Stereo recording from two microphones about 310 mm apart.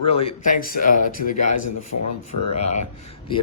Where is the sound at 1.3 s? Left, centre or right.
Left.